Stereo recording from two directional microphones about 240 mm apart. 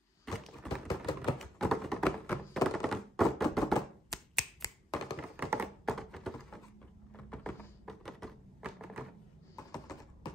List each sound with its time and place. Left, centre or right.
0.2 s a sound: centre
0.8 s typewriter: centre
1.4 s thunk: centre
4.9 s tap: centre
5.5 s thunk: centre